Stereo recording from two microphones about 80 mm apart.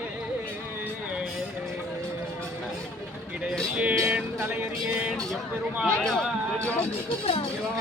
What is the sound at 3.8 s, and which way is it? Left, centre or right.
Music, centre.